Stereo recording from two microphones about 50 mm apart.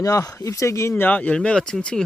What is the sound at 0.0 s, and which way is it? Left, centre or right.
Speech, left.